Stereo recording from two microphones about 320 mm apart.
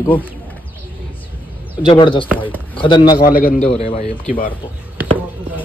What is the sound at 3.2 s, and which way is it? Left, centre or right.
Speech, left.